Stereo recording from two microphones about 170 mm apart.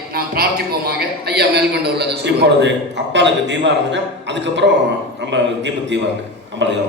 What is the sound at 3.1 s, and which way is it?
A man's voice, 90° right.